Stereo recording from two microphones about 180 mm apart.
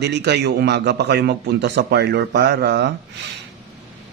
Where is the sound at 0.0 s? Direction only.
70° right (ahead or behind).